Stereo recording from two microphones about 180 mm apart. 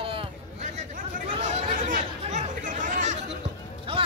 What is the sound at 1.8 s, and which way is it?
Chatter, 45° right (ahead or behind).